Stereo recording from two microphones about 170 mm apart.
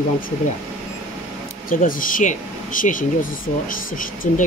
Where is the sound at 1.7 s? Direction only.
50° left (ahead or behind).